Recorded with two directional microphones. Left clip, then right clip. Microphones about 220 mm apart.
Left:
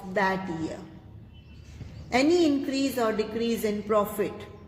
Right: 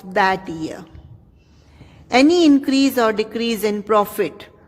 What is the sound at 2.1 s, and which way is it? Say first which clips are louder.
A man's voice: right 9 dB; 55° right (ahead or behind).